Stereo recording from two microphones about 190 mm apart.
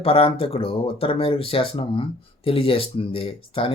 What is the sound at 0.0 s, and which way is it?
Speech, 30° left (ahead or behind).